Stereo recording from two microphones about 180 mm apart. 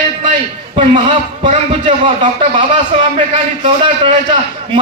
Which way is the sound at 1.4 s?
30° right (ahead or behind).